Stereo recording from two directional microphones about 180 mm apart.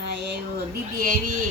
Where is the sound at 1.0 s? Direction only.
50° right (ahead or behind).